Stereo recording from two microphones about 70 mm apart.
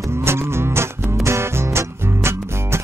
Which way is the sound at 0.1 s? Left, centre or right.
Right.